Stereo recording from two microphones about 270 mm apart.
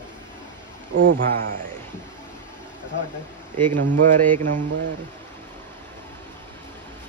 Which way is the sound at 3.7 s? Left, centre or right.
Right.